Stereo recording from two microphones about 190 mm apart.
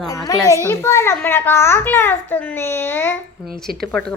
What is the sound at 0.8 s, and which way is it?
A child's voice, 15° left (ahead or behind).